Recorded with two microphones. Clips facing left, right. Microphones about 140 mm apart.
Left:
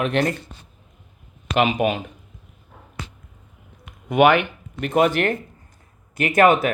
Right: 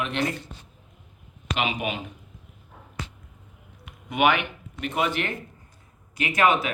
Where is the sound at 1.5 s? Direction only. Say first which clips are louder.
Left 8 dB; 50° left (ahead or behind).